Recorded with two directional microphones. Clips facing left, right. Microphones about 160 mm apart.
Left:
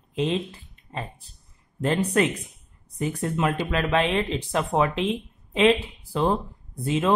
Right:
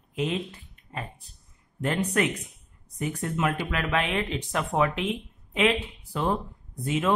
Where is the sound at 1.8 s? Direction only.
30° left (ahead or behind).